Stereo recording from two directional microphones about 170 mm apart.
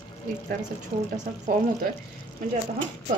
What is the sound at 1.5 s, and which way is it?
Speech, 55° right (ahead or behind).